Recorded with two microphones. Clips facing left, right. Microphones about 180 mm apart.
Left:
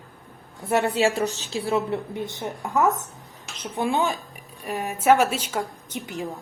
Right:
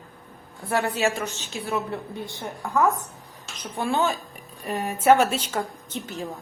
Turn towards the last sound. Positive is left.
turn(degrees=15)  # may be behind; listen again after turning